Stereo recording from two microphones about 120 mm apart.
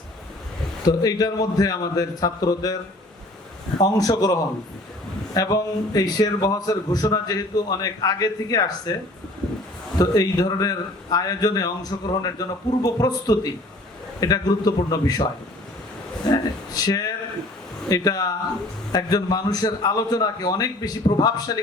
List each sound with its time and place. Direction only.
0.9 s a man's voice: 30° left (ahead or behind)
3.8 s a man's voice: 30° left (ahead or behind)
10.0 s a man's voice: 35° left (ahead or behind)
16.3 s a man's voice: 30° left (ahead or behind)